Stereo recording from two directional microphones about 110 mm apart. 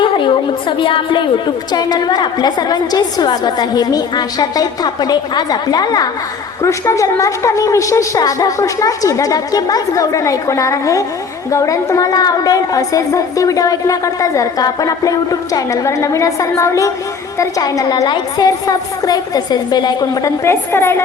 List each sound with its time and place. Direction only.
0.0 s a sound: 50° left (ahead or behind)
0.8 s a woman's voice: 50° left (ahead or behind)
20.4 s a woman's voice: 25° left (ahead or behind)